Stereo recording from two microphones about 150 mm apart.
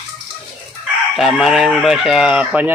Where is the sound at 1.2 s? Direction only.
Centre (ahead or behind).